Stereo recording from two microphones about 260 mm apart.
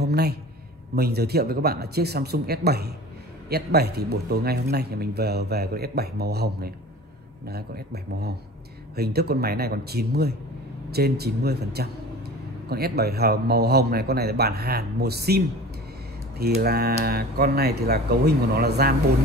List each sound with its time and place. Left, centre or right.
0.0 s a man's voice: right